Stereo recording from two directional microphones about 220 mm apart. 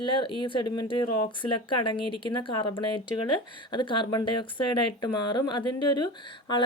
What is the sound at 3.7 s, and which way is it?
Speech, 20° left (ahead or behind).